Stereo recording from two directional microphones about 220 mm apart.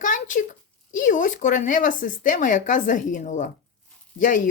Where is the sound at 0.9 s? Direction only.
35° left (ahead or behind).